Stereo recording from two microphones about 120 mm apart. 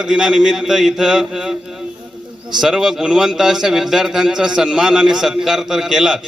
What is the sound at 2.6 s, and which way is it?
A man's voice, 5° right (ahead or behind).